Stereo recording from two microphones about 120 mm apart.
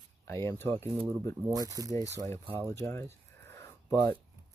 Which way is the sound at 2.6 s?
20° left (ahead or behind).